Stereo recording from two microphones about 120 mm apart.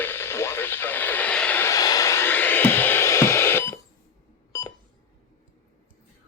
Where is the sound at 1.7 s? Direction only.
30° left (ahead or behind).